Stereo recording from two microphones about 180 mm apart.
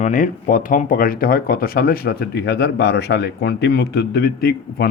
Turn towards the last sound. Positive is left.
turn(degrees=60)  # may be behind; listen again after turning